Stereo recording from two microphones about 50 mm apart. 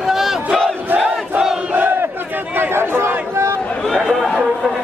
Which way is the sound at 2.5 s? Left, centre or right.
Right.